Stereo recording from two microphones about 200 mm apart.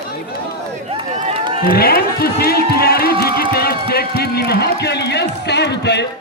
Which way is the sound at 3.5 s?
50° left (ahead or behind).